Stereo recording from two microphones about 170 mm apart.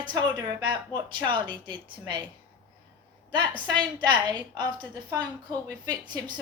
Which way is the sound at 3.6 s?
25° right (ahead or behind).